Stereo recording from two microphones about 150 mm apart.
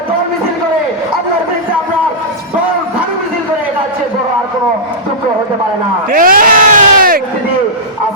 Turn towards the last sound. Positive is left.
turn(degrees=-70)  # may be behind; listen again after turning